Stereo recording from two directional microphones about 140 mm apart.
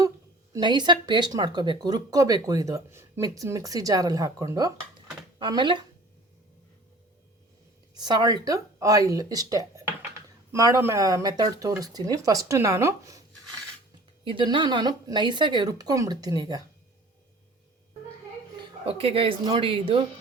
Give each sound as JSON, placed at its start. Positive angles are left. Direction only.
{"t": 0.6, "sound": "speech", "side_deg": -30}
{"t": 7.9, "sound": "speech", "side_deg": -30}
{"t": 14.3, "sound": "speech", "side_deg": -35}
{"t": 18.6, "sound": "speech", "side_deg": -40}